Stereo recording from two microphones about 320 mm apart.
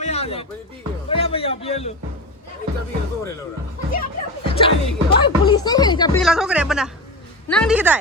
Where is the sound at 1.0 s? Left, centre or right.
Centre.